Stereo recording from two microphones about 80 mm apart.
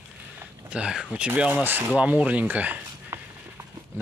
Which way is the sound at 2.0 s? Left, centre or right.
Centre.